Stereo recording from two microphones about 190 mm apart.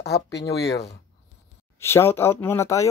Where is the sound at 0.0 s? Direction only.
60° left (ahead or behind).